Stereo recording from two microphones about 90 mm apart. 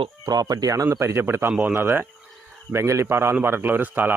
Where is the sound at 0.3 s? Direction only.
45° right (ahead or behind).